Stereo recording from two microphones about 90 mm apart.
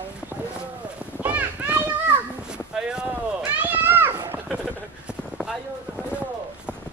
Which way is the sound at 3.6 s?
20° right (ahead or behind).